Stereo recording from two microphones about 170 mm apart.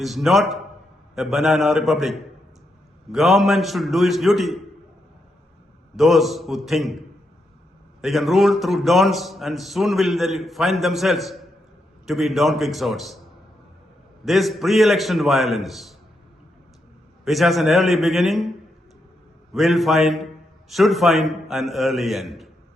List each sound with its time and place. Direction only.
0.0 s speech: centre (ahead or behind)
6.0 s speech: centre (ahead or behind)
8.0 s speech: centre (ahead or behind)
14.3 s speech: centre (ahead or behind)
17.2 s speech: centre (ahead or behind)
19.5 s a man's voice: centre (ahead or behind)